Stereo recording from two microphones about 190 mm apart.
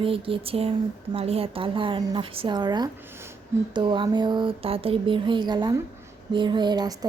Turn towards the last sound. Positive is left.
turn(degrees=-20)  # may be behind; listen again after turning